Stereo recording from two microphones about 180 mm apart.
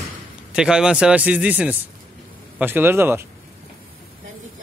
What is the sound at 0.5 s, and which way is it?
Speech, 5° right (ahead or behind).